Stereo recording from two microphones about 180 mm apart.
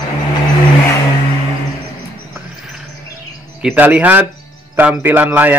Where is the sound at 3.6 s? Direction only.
5° right (ahead or behind).